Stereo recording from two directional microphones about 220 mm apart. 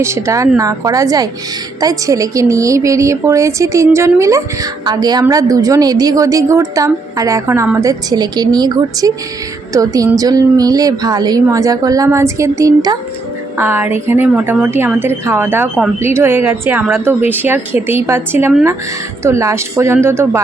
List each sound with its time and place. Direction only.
0.0 s a woman's voice: 15° right (ahead or behind)